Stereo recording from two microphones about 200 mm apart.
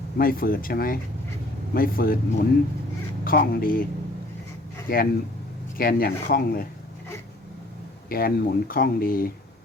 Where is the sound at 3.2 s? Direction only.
45° left (ahead or behind).